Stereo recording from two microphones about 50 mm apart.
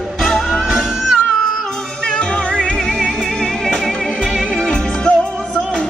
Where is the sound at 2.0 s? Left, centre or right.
Centre.